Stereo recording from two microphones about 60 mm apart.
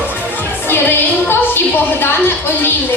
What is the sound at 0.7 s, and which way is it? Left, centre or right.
Music, left.